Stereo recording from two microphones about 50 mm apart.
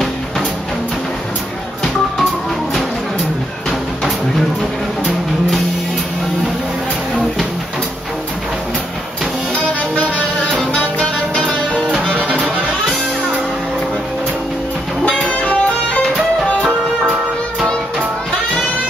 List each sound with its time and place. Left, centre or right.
9.9 s music: left
12.1 s music: right
15.0 s music: left